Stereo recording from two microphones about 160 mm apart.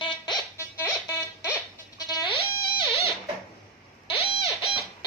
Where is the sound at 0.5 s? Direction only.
20° left (ahead or behind).